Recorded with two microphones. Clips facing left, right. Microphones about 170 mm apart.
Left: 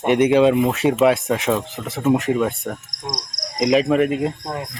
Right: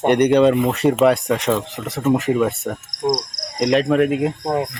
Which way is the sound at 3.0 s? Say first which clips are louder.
Right 11 dB; 25° right (ahead or behind).